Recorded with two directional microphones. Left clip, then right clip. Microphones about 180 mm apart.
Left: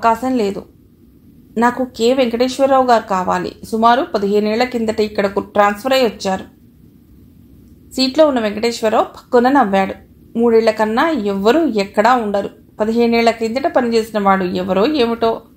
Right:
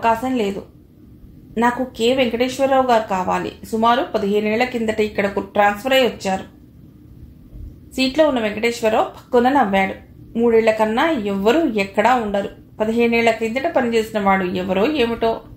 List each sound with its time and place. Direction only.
0.0 s a woman's voice: 35° left (ahead or behind)
7.9 s a woman's voice: 35° left (ahead or behind)